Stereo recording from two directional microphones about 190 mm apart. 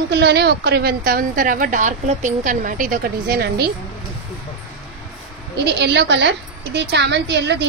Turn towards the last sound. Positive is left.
turn(degrees=-65)  # may be behind; listen again after turning